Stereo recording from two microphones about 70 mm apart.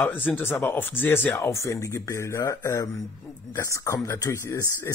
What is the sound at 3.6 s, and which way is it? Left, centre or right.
Speech, left.